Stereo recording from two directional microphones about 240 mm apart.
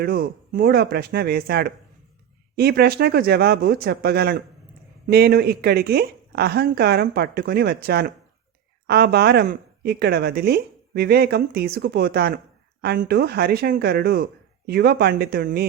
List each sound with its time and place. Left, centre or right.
0.0 s a woman's voice: right